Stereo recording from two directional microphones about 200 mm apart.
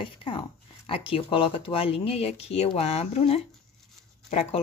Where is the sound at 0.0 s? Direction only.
25° left (ahead or behind).